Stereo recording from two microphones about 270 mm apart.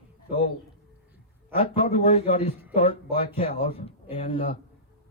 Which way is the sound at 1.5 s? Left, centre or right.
Centre.